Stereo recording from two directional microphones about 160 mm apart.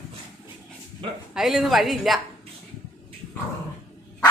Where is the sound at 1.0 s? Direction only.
35° right (ahead or behind).